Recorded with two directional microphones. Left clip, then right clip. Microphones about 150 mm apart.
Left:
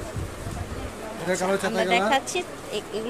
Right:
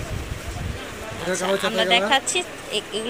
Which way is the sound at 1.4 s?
10° left (ahead or behind).